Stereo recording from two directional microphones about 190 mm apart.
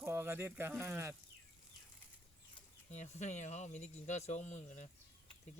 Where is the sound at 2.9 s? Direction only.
40° left (ahead or behind).